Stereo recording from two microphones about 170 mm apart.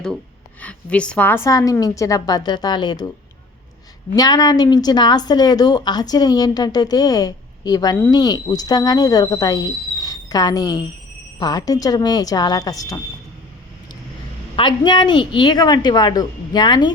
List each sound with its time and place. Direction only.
0.6 s a woman's voice: 5° left (ahead or behind); by 3.1 s 25° left (ahead or behind)
4.1 s a woman's voice: 20° left (ahead or behind)
14.5 s a woman's voice: 30° left (ahead or behind)